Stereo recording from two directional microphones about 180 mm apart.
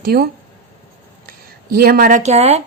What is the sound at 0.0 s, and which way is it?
Speech, 55° right (ahead or behind).